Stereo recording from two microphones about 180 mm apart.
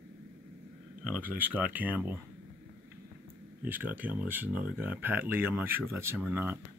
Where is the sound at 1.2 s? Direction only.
10° right (ahead or behind).